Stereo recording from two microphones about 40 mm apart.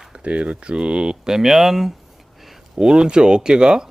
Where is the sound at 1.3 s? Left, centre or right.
Centre.